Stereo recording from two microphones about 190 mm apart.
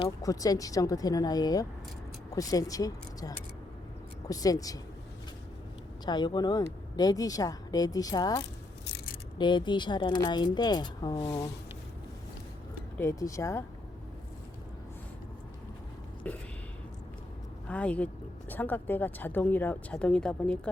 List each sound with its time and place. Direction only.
0.2 s speech: 20° left (ahead or behind)
6.1 s speech: 25° left (ahead or behind)
13.0 s speech: 15° left (ahead or behind)
16.2 s speech: 5° left (ahead or behind)
17.7 s speech: 5° left (ahead or behind)